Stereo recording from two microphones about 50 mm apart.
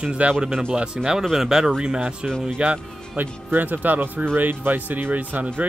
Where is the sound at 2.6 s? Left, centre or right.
Right.